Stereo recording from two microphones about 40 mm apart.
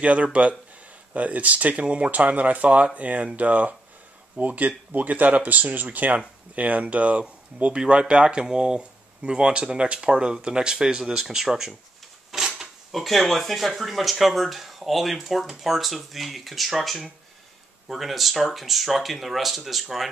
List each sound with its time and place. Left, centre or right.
0.0 s speech: right
7.8 s speech: right
11.1 s speech: centre
12.3 s a sound: centre
12.9 s speech: centre